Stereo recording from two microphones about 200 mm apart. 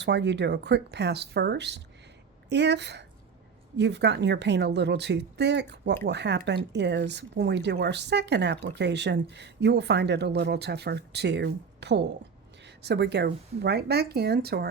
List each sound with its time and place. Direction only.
0.0 s speech: 60° right (ahead or behind)